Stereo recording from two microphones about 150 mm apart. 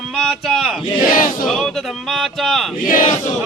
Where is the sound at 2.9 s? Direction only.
60° left (ahead or behind).